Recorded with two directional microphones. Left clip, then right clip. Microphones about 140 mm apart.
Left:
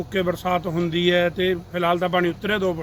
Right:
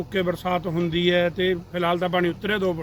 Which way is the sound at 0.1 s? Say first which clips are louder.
Left 2 dB; centre (ahead or behind).